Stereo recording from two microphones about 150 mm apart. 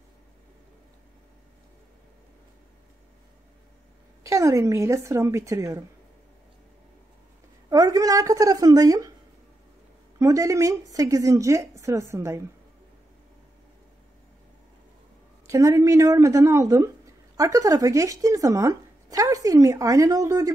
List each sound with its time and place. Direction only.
4.2 s speech: 20° right (ahead or behind)
7.7 s a woman's voice: 25° right (ahead or behind)
10.1 s speech: 20° right (ahead or behind)
15.4 s speech: 20° right (ahead or behind)